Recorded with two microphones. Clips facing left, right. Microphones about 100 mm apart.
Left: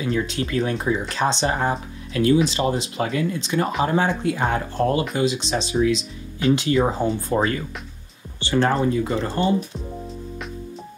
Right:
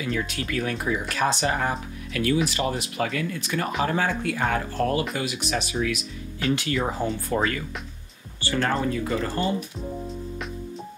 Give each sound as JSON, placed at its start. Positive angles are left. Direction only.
{"t": 0.0, "sound": "speech", "side_deg": 30}